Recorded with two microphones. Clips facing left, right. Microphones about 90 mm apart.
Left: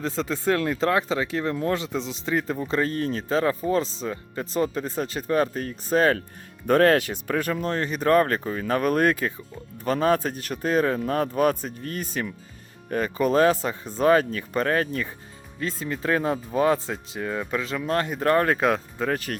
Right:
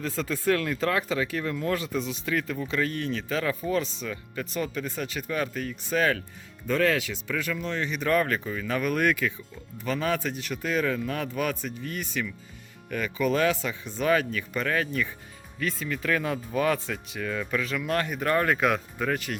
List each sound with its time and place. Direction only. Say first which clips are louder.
0.0 s speech: left 2 dB; 25° left (ahead or behind)
6.7 s speech: left 6 dB; 55° left (ahead or behind)